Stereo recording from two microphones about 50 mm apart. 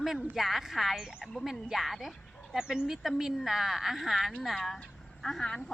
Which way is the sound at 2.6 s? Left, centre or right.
Centre.